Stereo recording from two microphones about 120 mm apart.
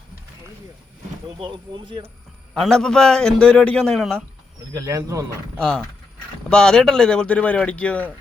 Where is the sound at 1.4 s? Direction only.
40° right (ahead or behind).